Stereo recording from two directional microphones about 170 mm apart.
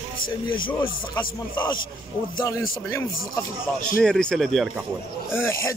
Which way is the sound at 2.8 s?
15° left (ahead or behind).